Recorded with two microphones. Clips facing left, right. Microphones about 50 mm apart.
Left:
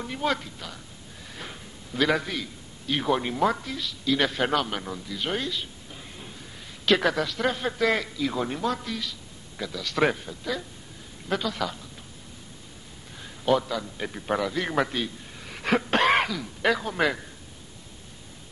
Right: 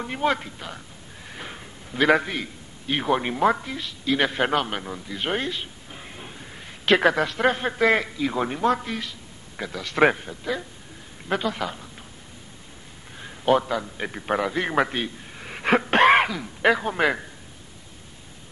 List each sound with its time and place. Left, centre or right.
0.0 s speech: right
1.2 s a sound: right
2.2 s speech: right
5.1 s speech: right
8.6 s speech: right
13.2 s a sound: right
13.8 s a man's voice: right